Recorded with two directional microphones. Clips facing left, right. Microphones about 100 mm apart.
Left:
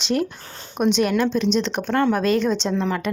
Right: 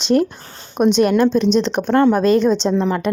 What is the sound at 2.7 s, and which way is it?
Speech, 25° right (ahead or behind).